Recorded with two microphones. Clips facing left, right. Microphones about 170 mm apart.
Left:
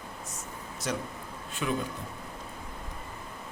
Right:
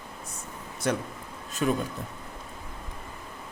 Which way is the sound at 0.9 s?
60° right (ahead or behind).